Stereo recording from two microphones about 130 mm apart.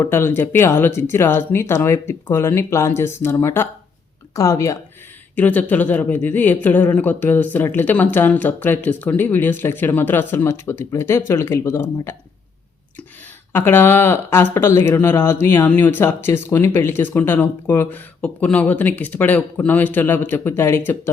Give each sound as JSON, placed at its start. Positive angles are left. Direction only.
{"t": 0.0, "sound": "speech", "side_deg": 20}
{"t": 5.4, "sound": "speech", "side_deg": 10}
{"t": 13.5, "sound": "speech", "side_deg": 15}